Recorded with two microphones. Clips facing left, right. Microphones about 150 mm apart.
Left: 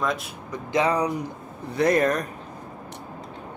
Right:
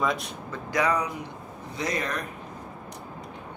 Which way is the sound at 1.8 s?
55° left (ahead or behind).